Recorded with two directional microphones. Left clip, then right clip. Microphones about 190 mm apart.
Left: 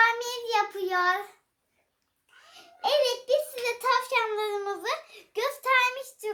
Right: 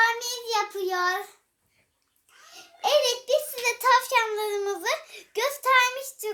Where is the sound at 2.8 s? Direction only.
45° right (ahead or behind).